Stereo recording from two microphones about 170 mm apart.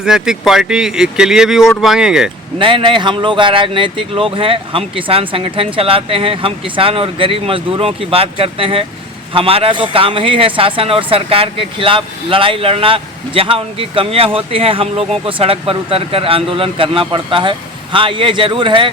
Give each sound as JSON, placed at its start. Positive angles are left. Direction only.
{"t": 0.0, "sound": "speech", "side_deg": -5}
{"t": 2.6, "sound": "speech", "side_deg": -30}